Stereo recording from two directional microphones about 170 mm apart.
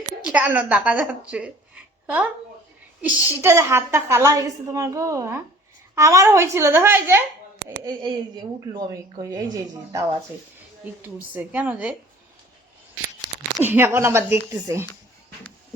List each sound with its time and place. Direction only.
0.3 s a woman's voice: 10° right (ahead or behind)
7.9 s a woman's voice: 25° right (ahead or behind)
11.3 s a woman's voice: 10° right (ahead or behind)
13.6 s a woman's voice: 10° right (ahead or behind)